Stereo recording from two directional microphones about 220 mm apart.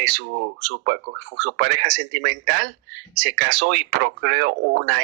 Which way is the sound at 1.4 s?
45° right (ahead or behind).